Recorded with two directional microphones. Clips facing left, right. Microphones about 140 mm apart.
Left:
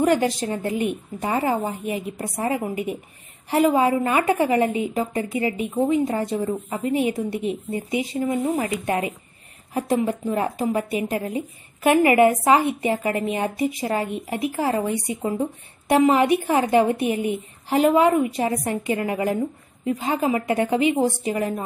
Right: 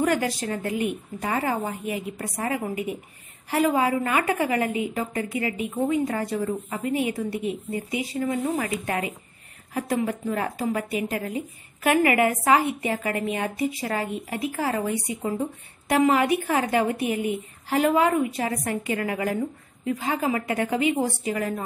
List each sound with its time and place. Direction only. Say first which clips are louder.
0.0 s a woman's voice: left 4 dB; 25° left (ahead or behind)
15.9 s a woman's voice: left 3 dB; 25° left (ahead or behind)